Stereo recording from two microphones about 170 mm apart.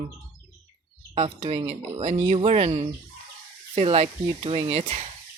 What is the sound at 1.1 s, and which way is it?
Speech, 35° right (ahead or behind).